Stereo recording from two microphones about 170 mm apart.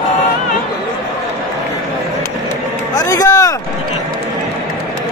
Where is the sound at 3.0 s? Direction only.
20° left (ahead or behind).